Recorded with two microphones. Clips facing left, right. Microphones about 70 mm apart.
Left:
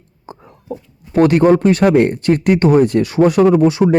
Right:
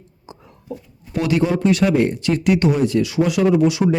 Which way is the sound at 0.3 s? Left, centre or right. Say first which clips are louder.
Left 5 dB; left.